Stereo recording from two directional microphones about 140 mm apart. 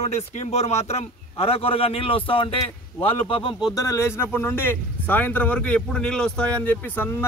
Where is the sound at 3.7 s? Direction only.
25° left (ahead or behind).